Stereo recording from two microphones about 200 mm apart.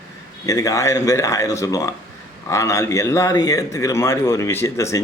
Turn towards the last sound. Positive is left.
turn(degrees=15)  # may be behind; listen again after turning